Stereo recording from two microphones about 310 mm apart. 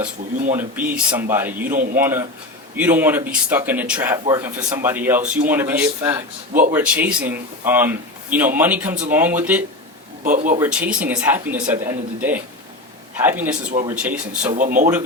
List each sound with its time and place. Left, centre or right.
0.5 s speech: centre
1.7 s speech: right
2.0 s a man's voice: centre
10.2 s speech: right
10.6 s speech: centre
14.5 s speech: right